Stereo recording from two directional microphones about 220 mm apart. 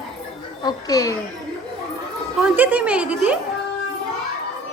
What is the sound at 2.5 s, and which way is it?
Speech, 5° right (ahead or behind).